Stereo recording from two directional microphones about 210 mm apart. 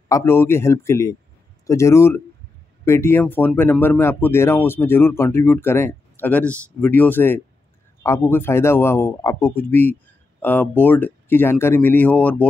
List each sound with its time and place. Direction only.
0.1 s speech: 10° left (ahead or behind)